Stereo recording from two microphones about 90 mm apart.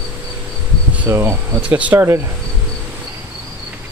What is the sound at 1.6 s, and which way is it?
Speech, 15° right (ahead or behind).